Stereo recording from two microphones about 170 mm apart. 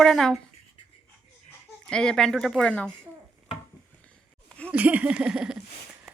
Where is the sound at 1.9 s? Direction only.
5° left (ahead or behind).